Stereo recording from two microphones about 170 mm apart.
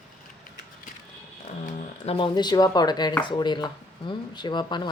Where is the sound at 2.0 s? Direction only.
30° left (ahead or behind).